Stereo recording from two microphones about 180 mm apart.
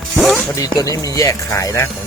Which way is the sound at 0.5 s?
20° left (ahead or behind).